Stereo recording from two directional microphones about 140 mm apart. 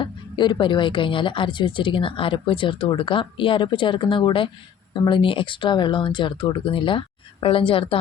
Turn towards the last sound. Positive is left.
turn(degrees=40)  # may be behind; listen again after turning